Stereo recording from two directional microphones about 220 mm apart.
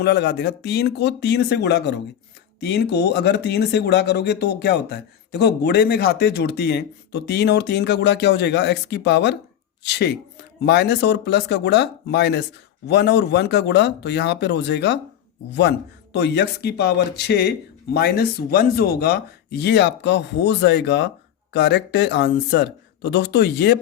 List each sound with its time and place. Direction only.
0.0 s speech: 50° left (ahead or behind)
16.1 s speech: 50° left (ahead or behind)